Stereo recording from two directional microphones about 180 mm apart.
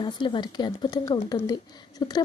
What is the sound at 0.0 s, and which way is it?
Speech, 25° left (ahead or behind).